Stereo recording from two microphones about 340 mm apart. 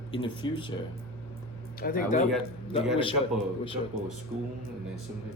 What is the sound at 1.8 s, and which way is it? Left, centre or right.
Speech, left.